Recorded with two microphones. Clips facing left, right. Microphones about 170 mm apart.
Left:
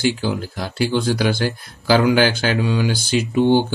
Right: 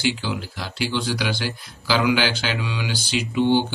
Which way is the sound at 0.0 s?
45° left (ahead or behind).